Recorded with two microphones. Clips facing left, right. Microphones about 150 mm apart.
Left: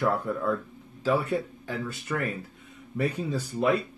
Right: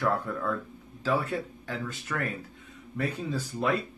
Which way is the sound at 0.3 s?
10° left (ahead or behind).